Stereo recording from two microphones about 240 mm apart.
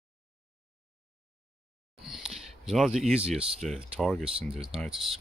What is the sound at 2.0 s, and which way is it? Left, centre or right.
Speech, centre.